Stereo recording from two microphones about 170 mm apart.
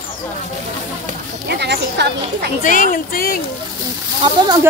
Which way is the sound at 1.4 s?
80° right.